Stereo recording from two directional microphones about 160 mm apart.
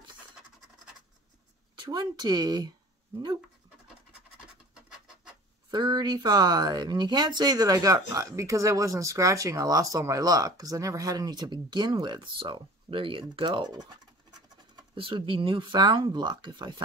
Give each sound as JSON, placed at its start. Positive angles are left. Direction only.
{"t": 1.8, "sound": "speech", "side_deg": -25}
{"t": 4.8, "sound": "bird", "side_deg": -5}
{"t": 5.7, "sound": "speech", "side_deg": -30}